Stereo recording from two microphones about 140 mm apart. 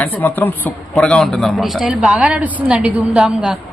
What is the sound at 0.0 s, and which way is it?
Speech, 15° left (ahead or behind).